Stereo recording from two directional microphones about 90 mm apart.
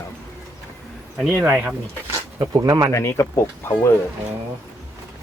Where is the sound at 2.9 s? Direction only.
30° left (ahead or behind).